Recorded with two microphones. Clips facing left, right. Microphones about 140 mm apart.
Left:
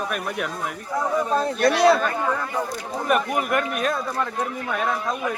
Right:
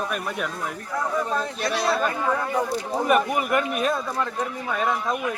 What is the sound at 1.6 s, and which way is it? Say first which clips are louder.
Speech: left 6 dB; 55° left (ahead or behind).